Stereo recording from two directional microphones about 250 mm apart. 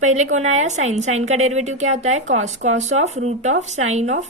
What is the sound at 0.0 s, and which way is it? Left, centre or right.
A woman's voice, right.